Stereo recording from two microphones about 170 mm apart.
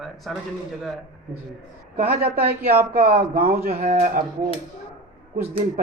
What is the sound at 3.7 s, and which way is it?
Speech, 40° right (ahead or behind).